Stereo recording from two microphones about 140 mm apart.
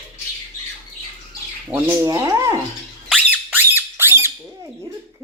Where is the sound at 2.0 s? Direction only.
25° right (ahead or behind).